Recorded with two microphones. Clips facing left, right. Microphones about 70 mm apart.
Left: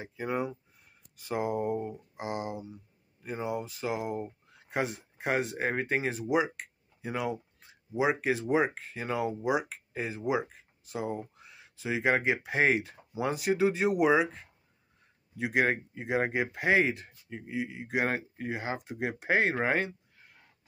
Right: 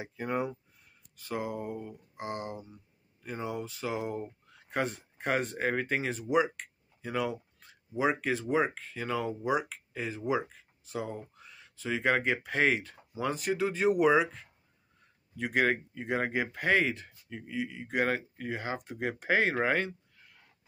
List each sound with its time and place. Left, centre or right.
0.0 s speech: centre
1.2 s speech: left
2.1 s speech: centre
18.6 s speech: centre